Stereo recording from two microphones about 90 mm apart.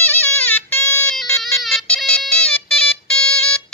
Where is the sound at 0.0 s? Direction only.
20° left (ahead or behind).